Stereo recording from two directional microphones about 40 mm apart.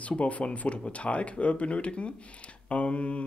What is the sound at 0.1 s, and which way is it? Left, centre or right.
Speech, left.